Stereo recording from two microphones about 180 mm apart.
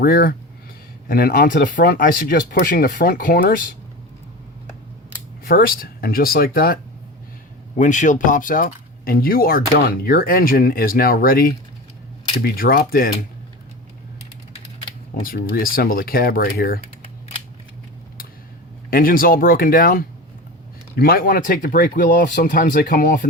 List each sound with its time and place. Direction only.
0.0 s speech: 55° left (ahead or behind)
5.5 s speech: 55° left (ahead or behind)
7.8 s speech: 45° left (ahead or behind)
15.1 s speech: 55° left (ahead or behind)
18.9 s speech: 50° left (ahead or behind)